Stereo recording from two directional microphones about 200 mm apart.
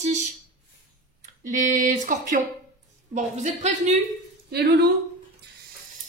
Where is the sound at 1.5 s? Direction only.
40° right (ahead or behind).